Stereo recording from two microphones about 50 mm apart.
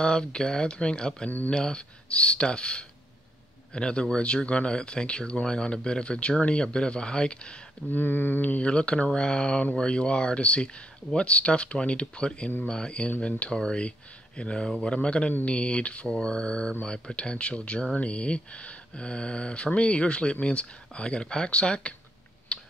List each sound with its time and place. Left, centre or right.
0.0 s speech: centre
7.9 s speech: left